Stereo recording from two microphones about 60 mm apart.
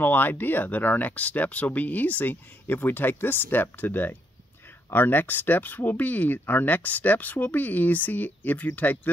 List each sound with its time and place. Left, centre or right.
0.0 s speech: left